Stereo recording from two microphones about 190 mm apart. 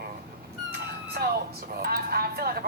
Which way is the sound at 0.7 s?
55° right (ahead or behind).